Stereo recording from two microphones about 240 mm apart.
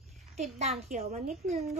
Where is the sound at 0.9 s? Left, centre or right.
Right.